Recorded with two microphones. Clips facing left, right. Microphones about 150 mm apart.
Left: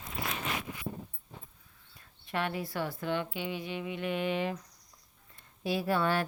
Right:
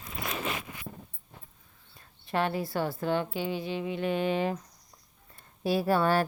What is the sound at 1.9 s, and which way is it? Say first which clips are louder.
Speech: right 5 dB; 35° right (ahead or behind).